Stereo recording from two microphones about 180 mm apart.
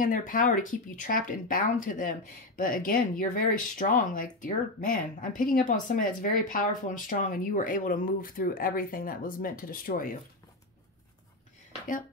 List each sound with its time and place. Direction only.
0.0 s speech: 50° left (ahead or behind)